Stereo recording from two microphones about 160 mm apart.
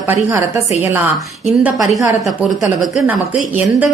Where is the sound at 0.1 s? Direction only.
15° right (ahead or behind).